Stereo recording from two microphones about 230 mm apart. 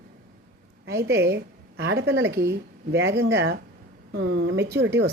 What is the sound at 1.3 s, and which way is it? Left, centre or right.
A woman's voice, right.